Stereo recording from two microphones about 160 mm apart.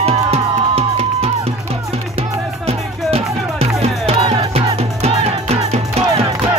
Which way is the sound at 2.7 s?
40° right (ahead or behind).